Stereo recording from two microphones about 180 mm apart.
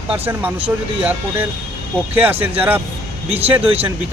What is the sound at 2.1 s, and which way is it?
Speech, 10° right (ahead or behind).